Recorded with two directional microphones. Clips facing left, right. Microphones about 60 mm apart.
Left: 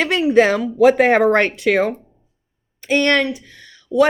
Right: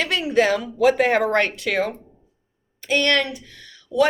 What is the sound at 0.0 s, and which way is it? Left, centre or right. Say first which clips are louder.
A woman's voice: left 5 dB; left.